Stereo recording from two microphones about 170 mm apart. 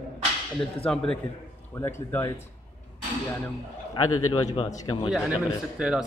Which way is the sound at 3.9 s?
30° left (ahead or behind).